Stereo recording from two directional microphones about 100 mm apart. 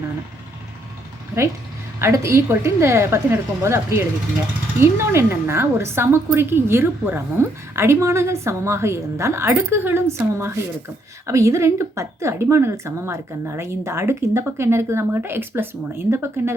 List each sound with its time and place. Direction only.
2.0 s a woman's voice: 25° right (ahead or behind)